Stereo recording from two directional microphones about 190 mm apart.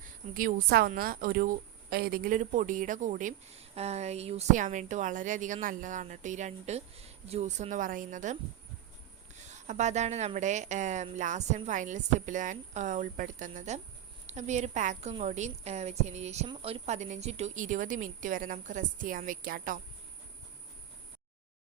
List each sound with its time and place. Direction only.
0.3 s a woman's voice: 50° right (ahead or behind)